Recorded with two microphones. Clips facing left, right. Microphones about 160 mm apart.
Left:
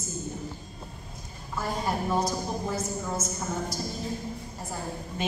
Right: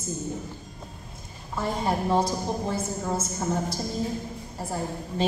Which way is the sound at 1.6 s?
25° right (ahead or behind).